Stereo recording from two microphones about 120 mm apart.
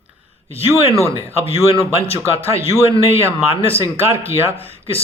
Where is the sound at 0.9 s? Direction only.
25° right (ahead or behind).